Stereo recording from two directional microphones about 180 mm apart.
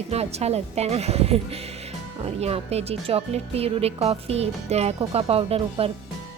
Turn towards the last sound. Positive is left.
turn(degrees=-35)  # may be behind; listen again after turning